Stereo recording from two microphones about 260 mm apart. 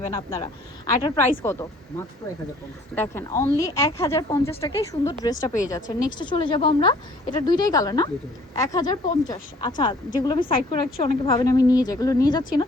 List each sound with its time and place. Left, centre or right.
0.1 s a woman's voice: centre